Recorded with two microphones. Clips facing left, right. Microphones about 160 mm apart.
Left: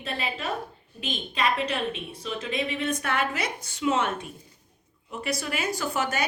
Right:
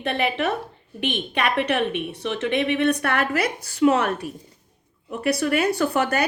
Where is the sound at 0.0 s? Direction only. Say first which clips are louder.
Right 9 dB; 70° right (ahead or behind).